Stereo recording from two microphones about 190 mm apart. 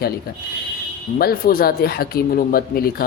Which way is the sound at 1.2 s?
50° left (ahead or behind).